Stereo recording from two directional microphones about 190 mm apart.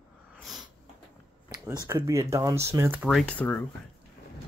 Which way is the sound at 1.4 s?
10° right (ahead or behind).